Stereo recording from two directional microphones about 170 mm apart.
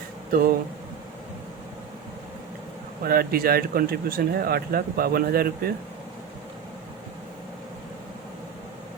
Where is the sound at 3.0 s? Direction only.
60° right (ahead or behind).